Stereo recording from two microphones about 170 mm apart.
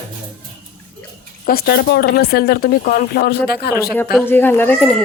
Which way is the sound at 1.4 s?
65° left (ahead or behind).